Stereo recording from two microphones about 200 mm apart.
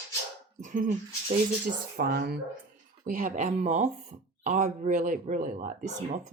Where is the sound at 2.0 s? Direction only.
50° right (ahead or behind).